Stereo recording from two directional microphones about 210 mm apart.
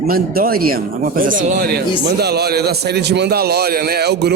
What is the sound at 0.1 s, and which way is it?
A man's voice, 45° right (ahead or behind).